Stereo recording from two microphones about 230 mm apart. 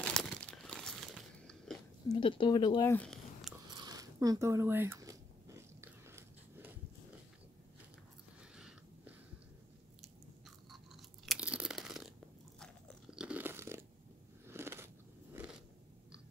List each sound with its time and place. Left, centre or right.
0.0 s crumpling: centre
2.0 s speech: left; by 3.5 s centre
3.7 s a sound: centre
5.8 s biting: centre
8.5 s a sound: centre
10.7 s chewing: centre
12.5 s crunch: centre
14.5 s biting: centre